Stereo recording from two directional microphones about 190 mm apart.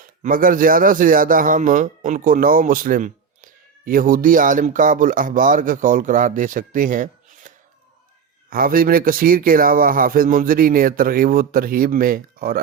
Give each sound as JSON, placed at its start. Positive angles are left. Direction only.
{"t": 0.0, "sound": "a man's voice", "side_deg": -45}